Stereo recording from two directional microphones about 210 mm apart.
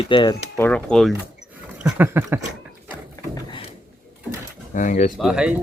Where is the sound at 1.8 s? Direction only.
10° right (ahead or behind).